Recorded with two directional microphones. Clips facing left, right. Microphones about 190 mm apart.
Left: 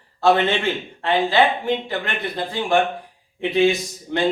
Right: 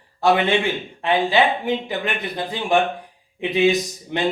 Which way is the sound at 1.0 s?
15° right (ahead or behind).